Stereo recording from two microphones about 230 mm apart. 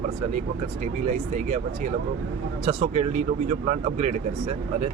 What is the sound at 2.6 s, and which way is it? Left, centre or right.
Speech, right.